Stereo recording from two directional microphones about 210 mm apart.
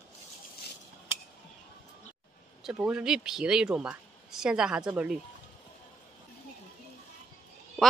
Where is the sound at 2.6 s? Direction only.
5° right (ahead or behind).